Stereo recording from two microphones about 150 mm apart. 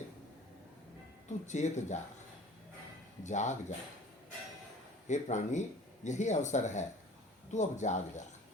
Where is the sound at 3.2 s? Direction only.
50° left (ahead or behind).